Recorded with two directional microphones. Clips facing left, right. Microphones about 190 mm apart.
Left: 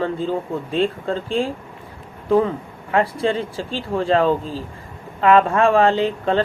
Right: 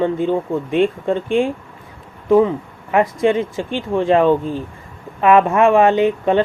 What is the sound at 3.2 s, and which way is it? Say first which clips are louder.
Speech: right 5 dB; 15° right (ahead or behind).